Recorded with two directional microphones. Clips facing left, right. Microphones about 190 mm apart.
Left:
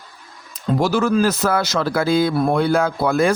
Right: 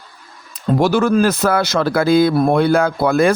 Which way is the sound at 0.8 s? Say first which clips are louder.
Right 3 dB; 60° right (ahead or behind).